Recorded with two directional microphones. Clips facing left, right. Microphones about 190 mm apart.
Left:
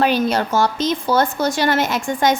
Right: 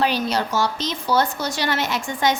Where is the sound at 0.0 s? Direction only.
50° left (ahead or behind).